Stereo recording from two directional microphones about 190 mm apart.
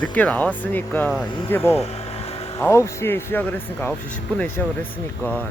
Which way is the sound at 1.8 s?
35° left (ahead or behind).